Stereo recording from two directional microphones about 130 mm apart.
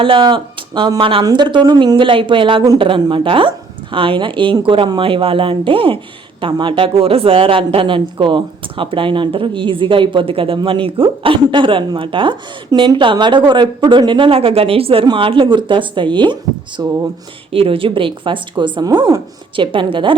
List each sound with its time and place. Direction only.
0.0 s speech: 40° right (ahead or behind)